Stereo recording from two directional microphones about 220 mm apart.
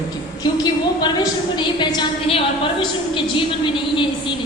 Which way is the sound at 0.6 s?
20° left (ahead or behind).